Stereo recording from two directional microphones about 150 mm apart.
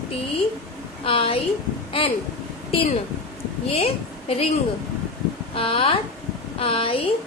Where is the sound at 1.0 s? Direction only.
40° left (ahead or behind).